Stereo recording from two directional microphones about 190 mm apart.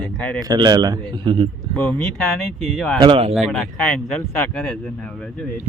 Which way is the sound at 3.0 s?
30° right (ahead or behind).